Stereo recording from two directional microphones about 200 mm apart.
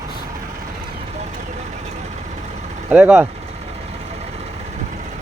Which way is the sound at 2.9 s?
5° right (ahead or behind).